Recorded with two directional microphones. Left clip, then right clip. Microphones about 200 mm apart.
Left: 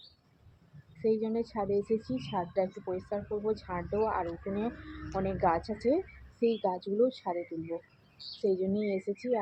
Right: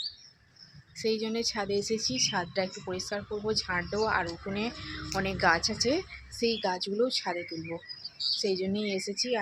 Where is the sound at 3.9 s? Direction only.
25° right (ahead or behind).